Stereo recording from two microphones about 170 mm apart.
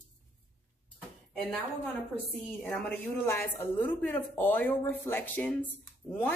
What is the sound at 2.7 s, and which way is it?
Speech, 10° left (ahead or behind).